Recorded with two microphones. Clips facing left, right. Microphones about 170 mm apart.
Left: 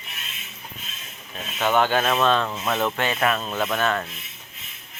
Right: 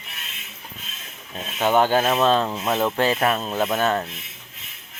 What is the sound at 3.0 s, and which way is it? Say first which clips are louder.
Speech: right 3 dB; 35° right (ahead or behind).